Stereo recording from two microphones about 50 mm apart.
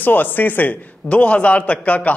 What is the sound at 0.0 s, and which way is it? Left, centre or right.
Speech, left.